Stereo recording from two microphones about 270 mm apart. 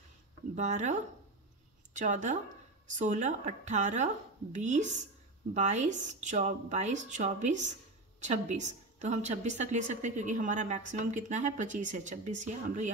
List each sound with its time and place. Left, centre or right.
0.6 s a woman's voice: right
2.0 s a woman's voice: right